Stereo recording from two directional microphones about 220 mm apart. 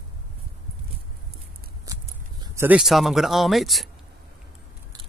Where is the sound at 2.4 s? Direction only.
10° right (ahead or behind).